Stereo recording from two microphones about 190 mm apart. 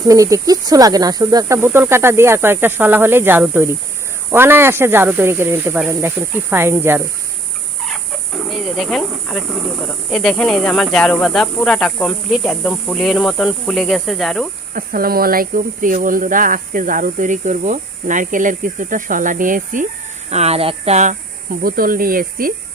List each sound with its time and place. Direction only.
0.1 s speech: 15° right (ahead or behind)
8.4 s speech: centre (ahead or behind)
14.7 s speech: 50° right (ahead or behind)
20.3 s speech: 35° right (ahead or behind)
21.6 s speech: 50° right (ahead or behind)